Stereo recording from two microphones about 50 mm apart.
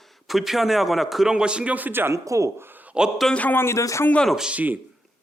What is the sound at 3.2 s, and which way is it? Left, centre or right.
Speech, centre.